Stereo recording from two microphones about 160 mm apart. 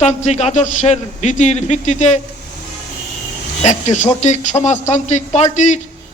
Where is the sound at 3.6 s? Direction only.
45° left (ahead or behind).